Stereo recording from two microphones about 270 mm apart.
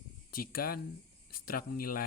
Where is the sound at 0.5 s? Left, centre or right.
Left.